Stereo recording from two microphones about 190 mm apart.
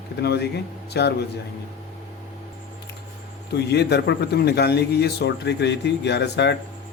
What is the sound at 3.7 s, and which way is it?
A man's voice, 60° left (ahead or behind).